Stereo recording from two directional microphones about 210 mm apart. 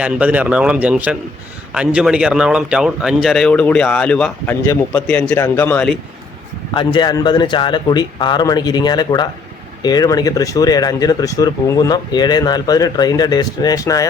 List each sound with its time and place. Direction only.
0.0 s speech: 5° right (ahead or behind)
6.7 s a man's voice: 20° left (ahead or behind)